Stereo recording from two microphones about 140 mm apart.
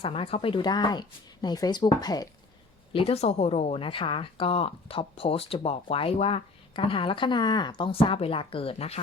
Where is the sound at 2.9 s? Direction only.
45° left (ahead or behind).